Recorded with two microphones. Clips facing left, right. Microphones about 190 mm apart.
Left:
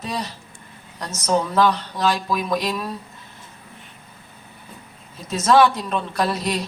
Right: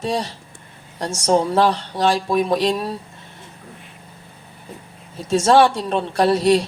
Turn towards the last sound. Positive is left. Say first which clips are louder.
# right 8 dB
turn(degrees=-30)  # may be behind; listen again after turning